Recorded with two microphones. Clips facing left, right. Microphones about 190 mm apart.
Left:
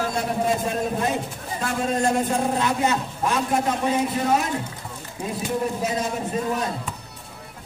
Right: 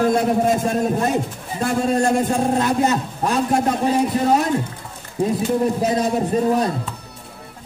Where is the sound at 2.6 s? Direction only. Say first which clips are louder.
Right 4 dB; 40° right (ahead or behind).